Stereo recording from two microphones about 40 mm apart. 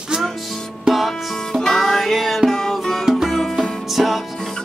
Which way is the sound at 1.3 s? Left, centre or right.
Centre.